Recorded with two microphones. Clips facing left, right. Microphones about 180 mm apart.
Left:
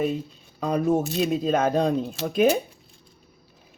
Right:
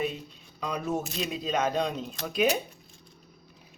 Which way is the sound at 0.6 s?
50° left (ahead or behind).